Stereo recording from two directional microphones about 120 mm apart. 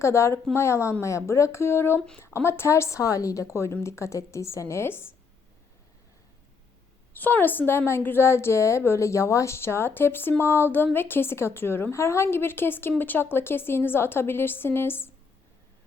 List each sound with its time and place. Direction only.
0.0 s a woman's voice: 20° left (ahead or behind)
2.0 s speech: 10° left (ahead or behind)
2.2 s a woman's voice: 20° left (ahead or behind)
7.2 s a woman's voice: 15° left (ahead or behind)